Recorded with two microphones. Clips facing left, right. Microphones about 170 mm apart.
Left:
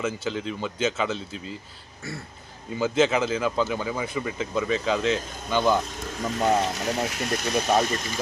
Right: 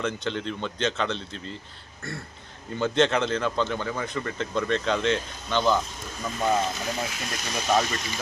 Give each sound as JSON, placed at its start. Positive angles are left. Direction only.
{"t": 0.0, "sound": "speech", "side_deg": 5}
{"t": 2.0, "sound": "a sound", "side_deg": 0}
{"t": 2.7, "sound": "speech", "side_deg": 5}
{"t": 6.4, "sound": "speech", "side_deg": 75}